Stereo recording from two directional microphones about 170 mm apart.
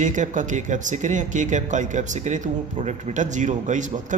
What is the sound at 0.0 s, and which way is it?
Speech, 45° right (ahead or behind).